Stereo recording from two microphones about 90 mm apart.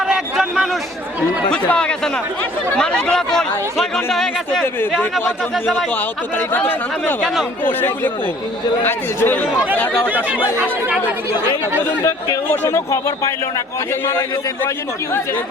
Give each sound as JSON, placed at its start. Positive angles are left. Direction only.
{"t": 0.1, "sound": "a sound", "side_deg": -5}
{"t": 1.5, "sound": "speech", "side_deg": 10}
{"t": 6.5, "sound": "speech", "side_deg": 20}
{"t": 10.1, "sound": "speech", "side_deg": -15}
{"t": 12.5, "sound": "speech", "side_deg": 30}